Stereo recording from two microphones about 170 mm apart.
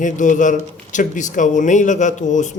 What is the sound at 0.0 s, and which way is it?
A man's voice, 50° left (ahead or behind).